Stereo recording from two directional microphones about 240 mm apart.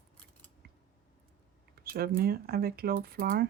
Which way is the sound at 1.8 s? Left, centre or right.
Right.